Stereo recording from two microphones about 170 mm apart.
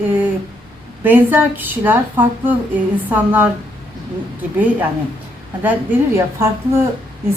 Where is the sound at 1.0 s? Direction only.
10° right (ahead or behind).